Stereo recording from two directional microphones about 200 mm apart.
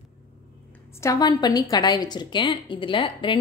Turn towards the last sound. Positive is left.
turn(degrees=25)  # may be behind; listen again after turning